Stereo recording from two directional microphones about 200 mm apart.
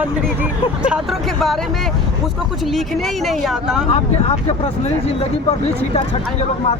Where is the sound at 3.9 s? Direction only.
30° left (ahead or behind).